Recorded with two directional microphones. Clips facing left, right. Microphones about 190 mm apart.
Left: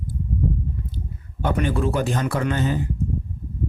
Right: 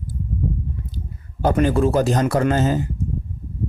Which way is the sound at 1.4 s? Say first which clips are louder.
Right 5 dB; 40° right (ahead or behind).